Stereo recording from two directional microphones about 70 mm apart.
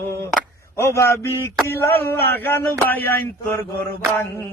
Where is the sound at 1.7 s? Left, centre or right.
Left.